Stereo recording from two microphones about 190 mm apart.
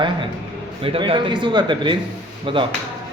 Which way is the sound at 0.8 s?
30° right (ahead or behind).